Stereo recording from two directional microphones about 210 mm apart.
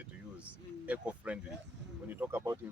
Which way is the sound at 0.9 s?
5° right (ahead or behind).